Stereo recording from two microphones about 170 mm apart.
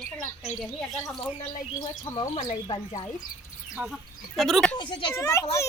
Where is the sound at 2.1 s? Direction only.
15° left (ahead or behind).